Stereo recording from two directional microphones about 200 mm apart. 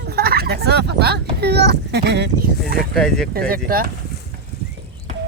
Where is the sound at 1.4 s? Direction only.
55° right (ahead or behind).